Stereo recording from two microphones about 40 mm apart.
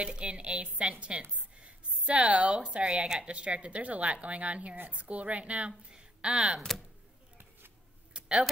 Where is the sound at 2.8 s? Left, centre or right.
Centre.